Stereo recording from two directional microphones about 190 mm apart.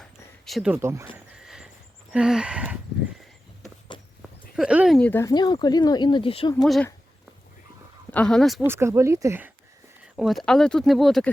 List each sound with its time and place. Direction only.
0.0 s a sound: centre (ahead or behind)
1.1 s a sound: 5° right (ahead or behind)
2.1 s speech: 5° right (ahead or behind)
4.2 s horse: 5° right (ahead or behind)
4.9 s speech: 10° left (ahead or behind)
5.3 s speech: 20° left (ahead or behind)
6.6 s speech: centre (ahead or behind)
8.1 s speech: 5° left (ahead or behind)
8.6 s speech: 15° right (ahead or behind)
10.2 s speech: centre (ahead or behind)